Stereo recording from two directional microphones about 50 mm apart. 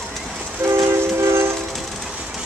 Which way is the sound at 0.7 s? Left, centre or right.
Right.